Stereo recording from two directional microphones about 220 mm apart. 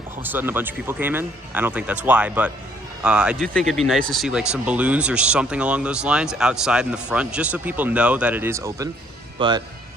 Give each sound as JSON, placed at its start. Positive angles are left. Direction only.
{"t": 0.2, "sound": "speech", "side_deg": -10}